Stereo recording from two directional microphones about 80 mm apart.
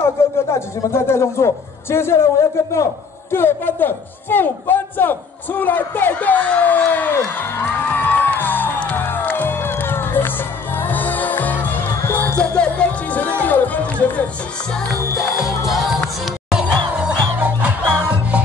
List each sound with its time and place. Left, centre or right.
0.0 s music: left
12.4 s music: centre
15.0 s music: left
15.4 s music: centre
17.4 s music: right